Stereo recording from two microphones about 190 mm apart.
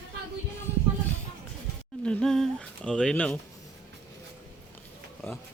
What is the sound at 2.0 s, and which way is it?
Humming, 5° left (ahead or behind).